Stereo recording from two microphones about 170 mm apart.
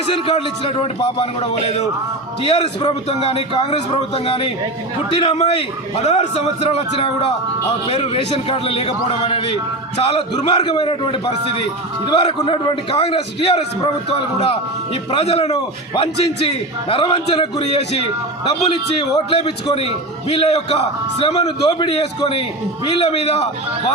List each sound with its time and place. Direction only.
0.0 s a man's voice: 35° left (ahead or behind)